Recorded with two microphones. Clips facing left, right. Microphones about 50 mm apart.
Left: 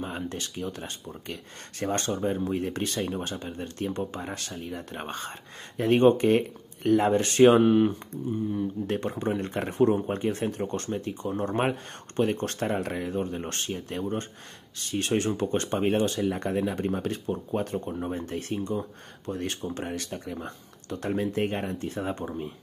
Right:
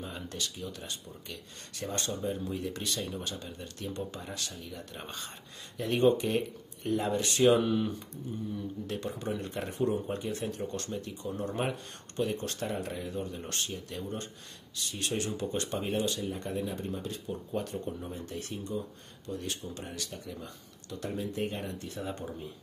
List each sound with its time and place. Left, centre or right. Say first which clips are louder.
0.0 s speech: left 5 dB; left
9.4 s speech: left 6 dB; left
9.7 s speech: left 8 dB; left
16.2 s speech: left 8 dB; left
17.3 s speech: left 5 dB; left